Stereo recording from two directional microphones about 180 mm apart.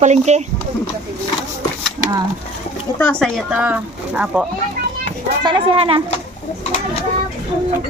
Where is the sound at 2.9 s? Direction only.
5° left (ahead or behind).